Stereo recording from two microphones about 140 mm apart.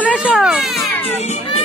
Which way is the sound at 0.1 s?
10° right (ahead or behind).